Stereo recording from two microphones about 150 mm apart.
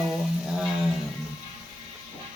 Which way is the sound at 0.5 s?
5° right (ahead or behind).